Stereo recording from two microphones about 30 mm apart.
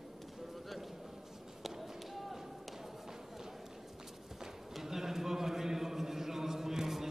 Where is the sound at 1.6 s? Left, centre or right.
Centre.